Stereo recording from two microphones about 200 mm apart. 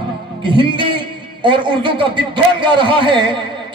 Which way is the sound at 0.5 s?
25° right (ahead or behind).